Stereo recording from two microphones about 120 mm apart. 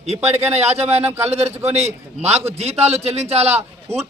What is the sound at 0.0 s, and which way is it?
A man's voice, 65° right (ahead or behind).